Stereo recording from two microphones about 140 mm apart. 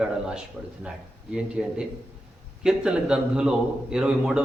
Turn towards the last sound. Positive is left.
turn(degrees=-5)  # may be behind; listen again after turning